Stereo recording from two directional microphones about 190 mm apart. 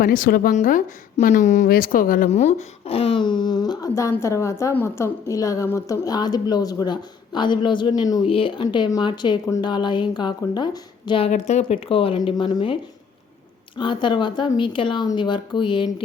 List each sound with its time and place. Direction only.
0.0 s a woman's voice: 45° left (ahead or behind); by 11.3 s 25° left (ahead or behind)
11.3 s a woman's voice: 35° left (ahead or behind)